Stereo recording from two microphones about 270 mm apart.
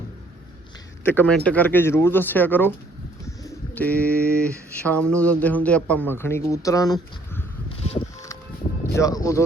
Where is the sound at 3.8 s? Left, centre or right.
Centre.